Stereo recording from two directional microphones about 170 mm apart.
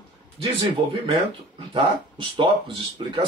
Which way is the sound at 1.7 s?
30° right (ahead or behind).